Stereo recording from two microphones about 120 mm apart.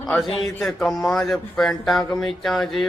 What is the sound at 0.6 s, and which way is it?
Speech, centre (ahead or behind).